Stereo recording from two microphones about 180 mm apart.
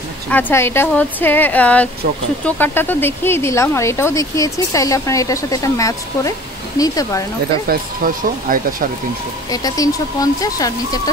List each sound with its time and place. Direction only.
0.3 s speech: 10° left (ahead or behind)
7.6 s speech: 55° right (ahead or behind)
9.5 s speech: 20° left (ahead or behind)